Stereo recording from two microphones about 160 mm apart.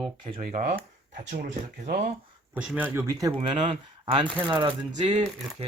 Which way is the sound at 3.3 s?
35° right (ahead or behind).